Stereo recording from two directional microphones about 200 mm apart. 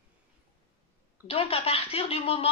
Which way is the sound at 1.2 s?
30° left (ahead or behind).